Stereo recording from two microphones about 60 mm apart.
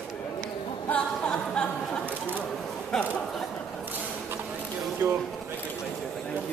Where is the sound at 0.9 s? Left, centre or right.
Centre.